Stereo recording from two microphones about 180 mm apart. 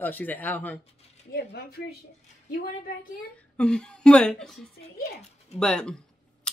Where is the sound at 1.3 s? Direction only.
60° left (ahead or behind).